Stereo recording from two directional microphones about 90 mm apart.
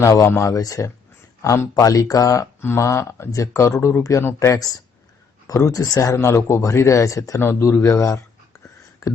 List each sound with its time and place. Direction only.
0.0 s speech: 35° left (ahead or behind)
7.4 s speech: 25° left (ahead or behind)
9.0 s a sound: 35° left (ahead or behind)